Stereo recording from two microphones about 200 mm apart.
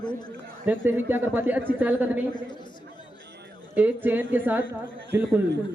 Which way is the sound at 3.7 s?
10° right (ahead or behind).